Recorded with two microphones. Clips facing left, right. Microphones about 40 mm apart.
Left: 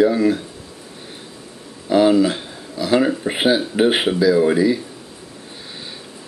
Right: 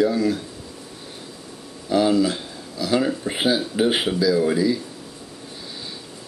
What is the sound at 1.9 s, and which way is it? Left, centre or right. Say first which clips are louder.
Speech: left 4 dB; left.